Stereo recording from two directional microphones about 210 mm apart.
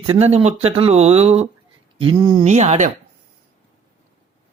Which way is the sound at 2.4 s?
35° right (ahead or behind).